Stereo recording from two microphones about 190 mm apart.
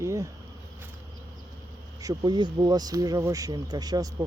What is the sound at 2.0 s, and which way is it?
Speech, 20° right (ahead or behind).